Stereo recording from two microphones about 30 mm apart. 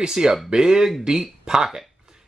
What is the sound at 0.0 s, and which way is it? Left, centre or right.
Speech, right.